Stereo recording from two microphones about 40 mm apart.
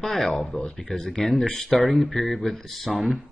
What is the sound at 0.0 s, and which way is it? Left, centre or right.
Speech, centre.